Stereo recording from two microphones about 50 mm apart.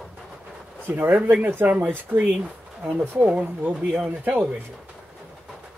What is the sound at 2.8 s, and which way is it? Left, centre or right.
Speech, right.